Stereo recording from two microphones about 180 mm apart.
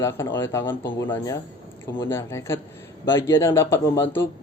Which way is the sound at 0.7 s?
25° left (ahead or behind).